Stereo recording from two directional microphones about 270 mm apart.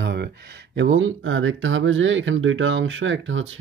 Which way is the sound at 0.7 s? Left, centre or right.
Right.